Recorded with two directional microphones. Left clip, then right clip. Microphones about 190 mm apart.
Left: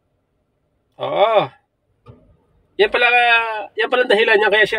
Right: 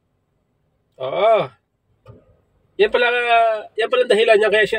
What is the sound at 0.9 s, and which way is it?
Speech, 15° left (ahead or behind).